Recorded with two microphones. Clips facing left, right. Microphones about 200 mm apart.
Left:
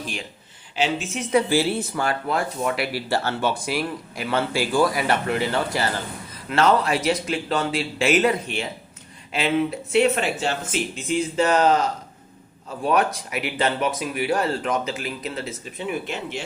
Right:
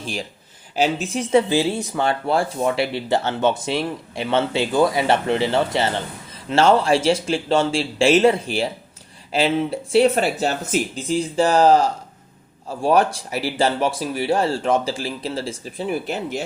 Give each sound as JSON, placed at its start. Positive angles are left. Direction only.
{"t": 0.0, "sound": "speech", "side_deg": -35}